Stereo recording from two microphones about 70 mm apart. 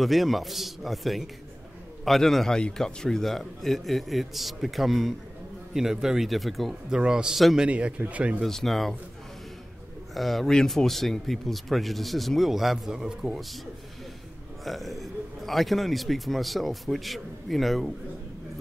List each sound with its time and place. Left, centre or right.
0.0 s speech: centre
6.9 s a man's voice: centre
8.5 s speech: centre
10.1 s speech: centre
14.6 s speech: centre